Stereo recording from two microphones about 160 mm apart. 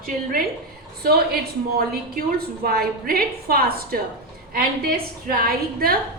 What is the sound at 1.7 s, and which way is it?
A woman's voice, 70° right (ahead or behind).